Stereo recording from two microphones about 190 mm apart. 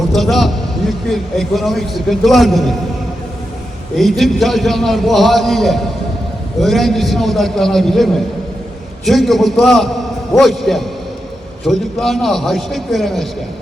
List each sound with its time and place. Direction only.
0.1 s a man's voice: centre (ahead or behind)
3.9 s a man's voice: centre (ahead or behind)